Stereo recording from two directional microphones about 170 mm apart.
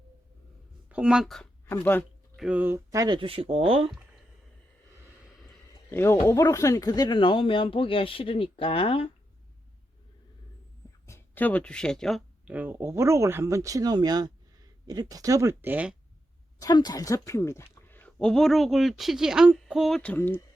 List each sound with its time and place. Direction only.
0.9 s speech: 5° right (ahead or behind)
1.7 s speech: 10° left (ahead or behind)
2.3 s speech: 5° right (ahead or behind); by 3.8 s 35° right (ahead or behind)
5.9 s speech: 15° left (ahead or behind); by 9.0 s 30° left (ahead or behind)
11.0 s a sound: 15° left (ahead or behind)
12.5 s speech: 10° right (ahead or behind)
16.6 s speech: 25° left (ahead or behind)